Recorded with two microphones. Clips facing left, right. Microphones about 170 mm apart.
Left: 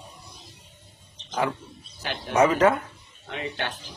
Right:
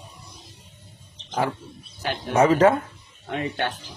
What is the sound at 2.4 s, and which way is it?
Speech, 30° right (ahead or behind).